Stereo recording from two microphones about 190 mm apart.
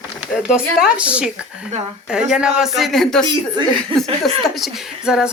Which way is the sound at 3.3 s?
25° right (ahead or behind).